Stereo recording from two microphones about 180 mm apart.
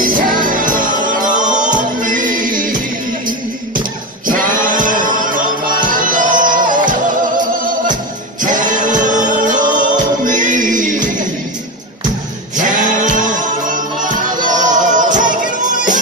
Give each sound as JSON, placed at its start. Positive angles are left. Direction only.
{"t": 0.0, "sound": "music", "side_deg": -50}
{"t": 4.5, "sound": "music", "side_deg": -45}
{"t": 12.5, "sound": "music", "side_deg": -45}